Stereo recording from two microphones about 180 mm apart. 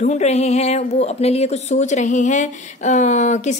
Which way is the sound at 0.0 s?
40° left (ahead or behind).